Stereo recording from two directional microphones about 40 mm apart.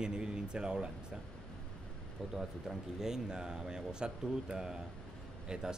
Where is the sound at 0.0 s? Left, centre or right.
Centre.